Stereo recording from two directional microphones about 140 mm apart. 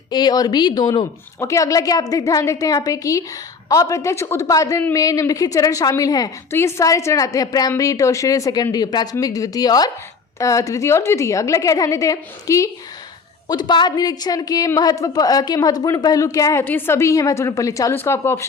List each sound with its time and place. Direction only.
0.1 s speech: 30° left (ahead or behind)